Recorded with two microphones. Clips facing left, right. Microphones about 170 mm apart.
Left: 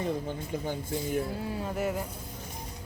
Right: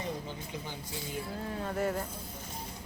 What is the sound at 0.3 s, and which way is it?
Speech, 50° left (ahead or behind).